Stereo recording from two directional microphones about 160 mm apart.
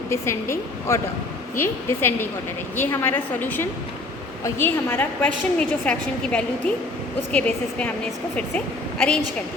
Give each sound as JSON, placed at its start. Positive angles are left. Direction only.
{"t": 0.1, "sound": "a woman's voice", "side_deg": 15}